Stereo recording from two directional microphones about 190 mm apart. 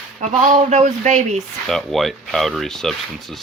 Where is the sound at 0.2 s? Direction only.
40° right (ahead or behind).